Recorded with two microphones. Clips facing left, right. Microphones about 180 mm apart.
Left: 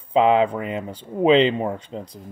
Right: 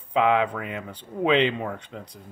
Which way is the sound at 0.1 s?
30° left (ahead or behind).